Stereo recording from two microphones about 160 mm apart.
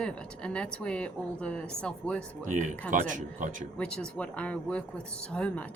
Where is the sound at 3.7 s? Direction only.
5° left (ahead or behind).